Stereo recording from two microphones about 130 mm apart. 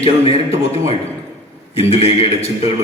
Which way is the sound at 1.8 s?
50° left (ahead or behind).